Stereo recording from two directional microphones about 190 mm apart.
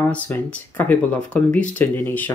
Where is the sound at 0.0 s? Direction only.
10° left (ahead or behind).